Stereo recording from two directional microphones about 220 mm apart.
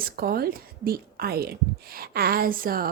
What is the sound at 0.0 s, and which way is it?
A woman's voice, 40° right (ahead or behind).